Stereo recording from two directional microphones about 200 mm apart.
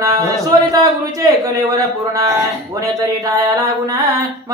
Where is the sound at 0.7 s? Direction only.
15° right (ahead or behind).